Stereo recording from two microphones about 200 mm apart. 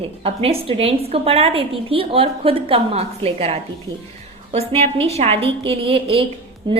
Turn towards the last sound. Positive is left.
turn(degrees=-25)  # may be behind; listen again after turning